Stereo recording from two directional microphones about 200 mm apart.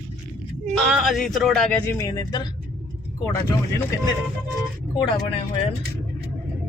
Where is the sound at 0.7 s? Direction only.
Centre (ahead or behind); by 2.5 s 20° left (ahead or behind).